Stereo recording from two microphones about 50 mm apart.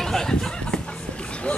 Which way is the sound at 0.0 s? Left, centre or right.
Centre.